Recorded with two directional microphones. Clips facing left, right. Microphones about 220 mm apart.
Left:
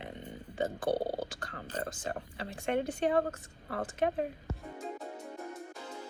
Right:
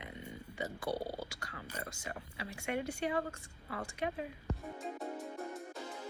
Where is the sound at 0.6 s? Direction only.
50° left (ahead or behind).